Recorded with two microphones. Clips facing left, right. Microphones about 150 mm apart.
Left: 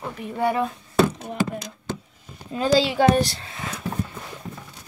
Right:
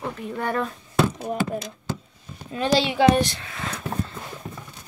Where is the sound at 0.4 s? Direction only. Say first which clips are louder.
Left 4 dB; 10° left (ahead or behind).